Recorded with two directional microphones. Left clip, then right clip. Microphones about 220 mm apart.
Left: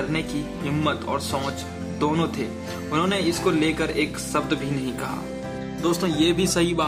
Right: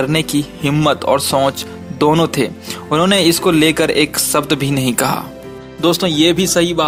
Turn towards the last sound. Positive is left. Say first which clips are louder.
# right 8 dB
turn(degrees=-25)  # may be behind; listen again after turning